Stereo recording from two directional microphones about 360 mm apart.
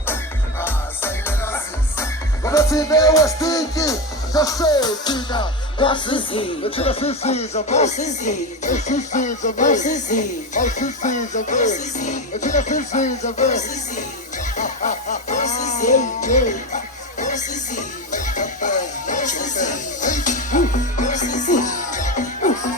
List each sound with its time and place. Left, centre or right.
0.6 s music: centre